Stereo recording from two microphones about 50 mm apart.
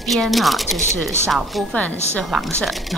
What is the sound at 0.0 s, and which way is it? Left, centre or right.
Speech, centre.